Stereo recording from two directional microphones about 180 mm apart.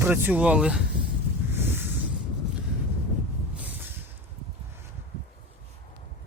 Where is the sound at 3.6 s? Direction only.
10° right (ahead or behind).